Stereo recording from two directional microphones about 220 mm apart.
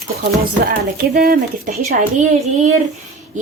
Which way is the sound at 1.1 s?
40° right (ahead or behind).